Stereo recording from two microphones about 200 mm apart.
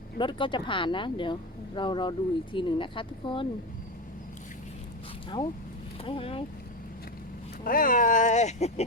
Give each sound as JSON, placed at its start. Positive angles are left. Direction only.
{"t": 0.2, "sound": "speech", "side_deg": 25}
{"t": 6.1, "sound": "speech", "side_deg": 25}
{"t": 7.6, "sound": "speech", "side_deg": 45}